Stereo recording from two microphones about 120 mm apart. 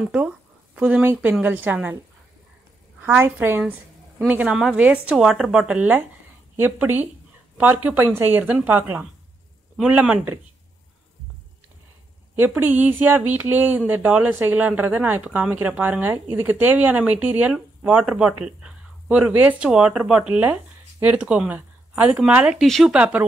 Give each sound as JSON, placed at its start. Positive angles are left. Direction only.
{"t": 0.7, "sound": "speech", "side_deg": -10}
{"t": 3.0, "sound": "speech", "side_deg": -20}
{"t": 12.5, "sound": "speech", "side_deg": -15}
{"t": 22.7, "sound": "speech", "side_deg": 5}
{"t": 22.9, "sound": "speech", "side_deg": -10}